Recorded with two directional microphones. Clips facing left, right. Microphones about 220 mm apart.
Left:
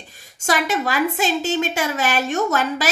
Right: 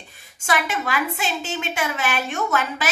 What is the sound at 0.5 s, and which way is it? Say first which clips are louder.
A woman's voice: left 3 dB; 35° left (ahead or behind).